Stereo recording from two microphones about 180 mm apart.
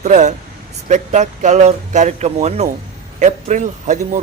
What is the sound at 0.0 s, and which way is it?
A man's voice, 40° right (ahead or behind).